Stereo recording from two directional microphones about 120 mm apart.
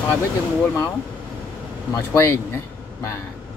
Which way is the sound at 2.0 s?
20° left (ahead or behind).